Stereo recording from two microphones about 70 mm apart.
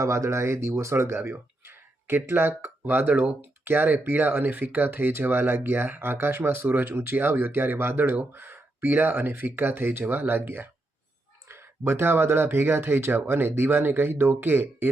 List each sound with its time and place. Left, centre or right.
0.0 s speech: right
11.4 s a sound: right
11.8 s speech: right